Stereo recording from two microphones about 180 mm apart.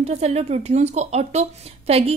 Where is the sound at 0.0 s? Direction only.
35° right (ahead or behind).